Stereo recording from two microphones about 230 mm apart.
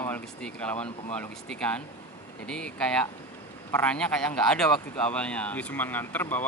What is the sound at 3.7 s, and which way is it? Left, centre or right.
A man's voice, centre.